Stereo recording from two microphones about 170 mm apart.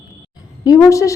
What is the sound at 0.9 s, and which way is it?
Speech, 20° left (ahead or behind).